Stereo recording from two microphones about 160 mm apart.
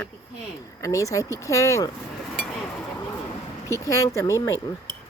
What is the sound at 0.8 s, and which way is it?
Speech, 20° left (ahead or behind).